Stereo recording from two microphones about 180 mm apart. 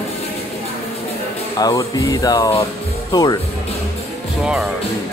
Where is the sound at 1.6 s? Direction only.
20° left (ahead or behind).